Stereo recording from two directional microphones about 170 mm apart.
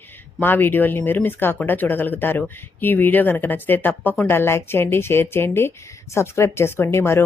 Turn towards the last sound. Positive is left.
turn(degrees=15)  # may be behind; listen again after turning